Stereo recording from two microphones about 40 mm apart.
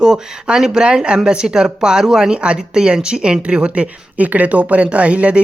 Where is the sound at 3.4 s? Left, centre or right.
Right.